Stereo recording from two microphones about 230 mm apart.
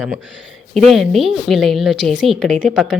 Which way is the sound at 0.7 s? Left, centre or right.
Centre.